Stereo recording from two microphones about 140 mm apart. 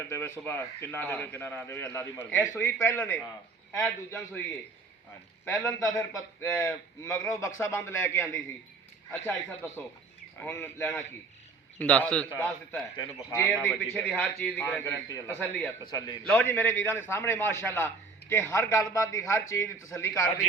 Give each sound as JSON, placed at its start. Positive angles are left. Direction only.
{"t": 0.1, "sound": "a man's voice", "side_deg": 15}
{"t": 5.8, "sound": "a man's voice", "side_deg": 20}
{"t": 14.5, "sound": "a man's voice", "side_deg": 15}
{"t": 15.8, "sound": "a man's voice", "side_deg": 30}
{"t": 16.2, "sound": "a man's voice", "side_deg": 10}